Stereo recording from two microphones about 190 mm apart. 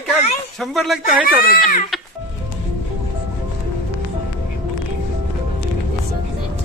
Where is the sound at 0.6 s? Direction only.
Centre (ahead or behind).